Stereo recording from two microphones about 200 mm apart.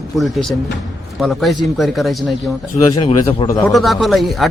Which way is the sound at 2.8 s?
30° left (ahead or behind).